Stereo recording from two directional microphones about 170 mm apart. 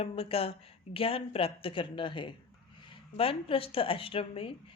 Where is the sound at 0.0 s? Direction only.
35° left (ahead or behind).